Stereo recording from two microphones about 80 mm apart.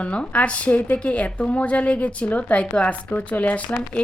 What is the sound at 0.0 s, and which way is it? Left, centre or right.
A woman's voice, centre.